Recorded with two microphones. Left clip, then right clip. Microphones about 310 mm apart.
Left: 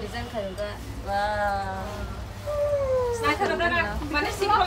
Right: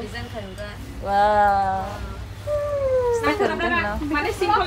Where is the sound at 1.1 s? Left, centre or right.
Centre.